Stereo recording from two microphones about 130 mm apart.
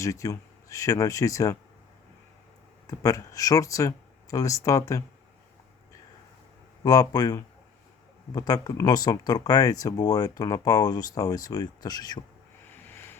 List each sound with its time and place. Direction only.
0.0 s speech: 25° left (ahead or behind)
2.8 s speech: 25° left (ahead or behind)
6.8 s speech: 30° left (ahead or behind)
12.9 s vehicle: 20° left (ahead or behind)